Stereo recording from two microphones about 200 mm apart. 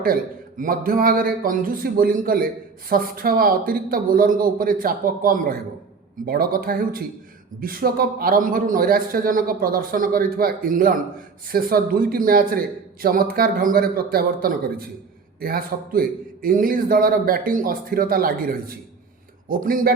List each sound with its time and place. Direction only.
0.0 s a man's voice: 45° right (ahead or behind)